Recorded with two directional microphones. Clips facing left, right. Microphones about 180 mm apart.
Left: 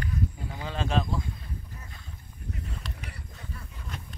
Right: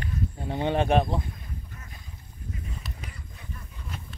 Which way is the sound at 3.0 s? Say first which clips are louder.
Even; 65° left (ahead or behind).